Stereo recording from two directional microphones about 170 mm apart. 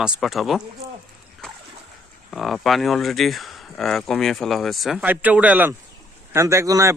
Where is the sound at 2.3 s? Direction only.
Centre (ahead or behind).